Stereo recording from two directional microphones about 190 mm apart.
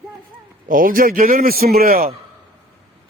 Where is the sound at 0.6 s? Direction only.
45° right (ahead or behind).